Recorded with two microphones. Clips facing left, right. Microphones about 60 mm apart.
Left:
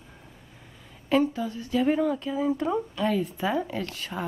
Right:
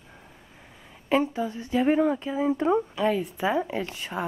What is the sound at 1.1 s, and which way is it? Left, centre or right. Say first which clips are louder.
Speech: even; right.